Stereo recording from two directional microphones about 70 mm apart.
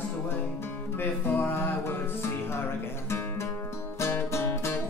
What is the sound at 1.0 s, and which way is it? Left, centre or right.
Music, left.